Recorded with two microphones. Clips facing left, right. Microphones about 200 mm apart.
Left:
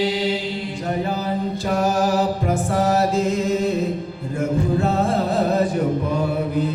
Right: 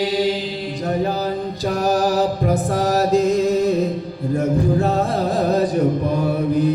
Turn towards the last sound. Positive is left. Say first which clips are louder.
# right 1 dB
turn(degrees=-35)  # may be behind; listen again after turning